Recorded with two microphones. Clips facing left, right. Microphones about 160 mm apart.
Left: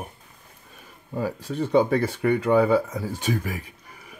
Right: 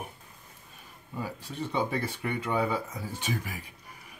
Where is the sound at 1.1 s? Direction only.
45° left (ahead or behind).